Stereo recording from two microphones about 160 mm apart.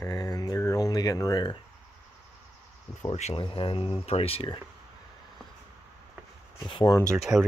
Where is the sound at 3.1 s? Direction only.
40° left (ahead or behind).